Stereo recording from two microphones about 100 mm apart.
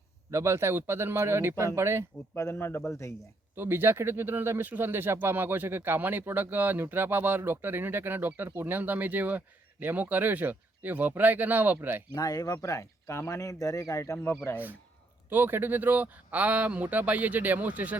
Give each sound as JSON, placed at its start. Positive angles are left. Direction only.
{"t": 0.3, "sound": "speech", "side_deg": -25}
{"t": 2.3, "sound": "a man's voice", "side_deg": 25}
{"t": 3.5, "sound": "speech", "side_deg": -20}
{"t": 12.1, "sound": "speech", "side_deg": 40}
{"t": 15.3, "sound": "speech", "side_deg": -20}